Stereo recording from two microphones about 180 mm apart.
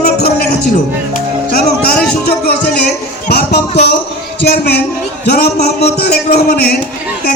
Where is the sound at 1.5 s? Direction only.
60° left (ahead or behind).